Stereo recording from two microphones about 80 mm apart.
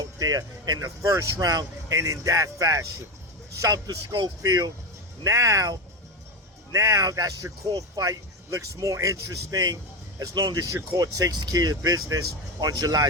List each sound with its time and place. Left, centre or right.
0.0 s speech: right
4.1 s speech: right
5.2 s speech: right
10.5 s speech: right